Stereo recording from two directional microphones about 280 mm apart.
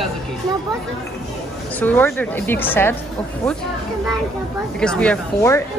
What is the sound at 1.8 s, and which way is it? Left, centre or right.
Speech, centre.